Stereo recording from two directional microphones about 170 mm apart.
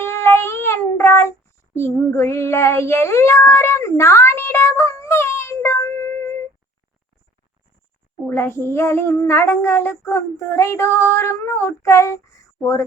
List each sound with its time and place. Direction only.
0.0 s child singing: 15° left (ahead or behind)
8.3 s child singing: 15° left (ahead or behind)